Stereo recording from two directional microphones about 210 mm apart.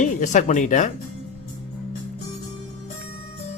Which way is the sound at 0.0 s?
35° left (ahead or behind).